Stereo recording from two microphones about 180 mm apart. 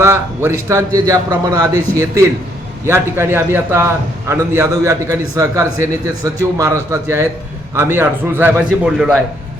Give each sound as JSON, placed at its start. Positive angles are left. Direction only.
{"t": 0.0, "sound": "a man's voice", "side_deg": -15}